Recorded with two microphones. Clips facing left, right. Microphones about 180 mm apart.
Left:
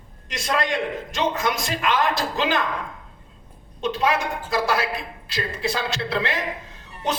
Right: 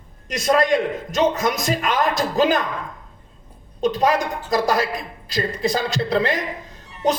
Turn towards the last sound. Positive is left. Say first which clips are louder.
# right 6 dB
turn(degrees=-40)  # may be behind; listen again after turning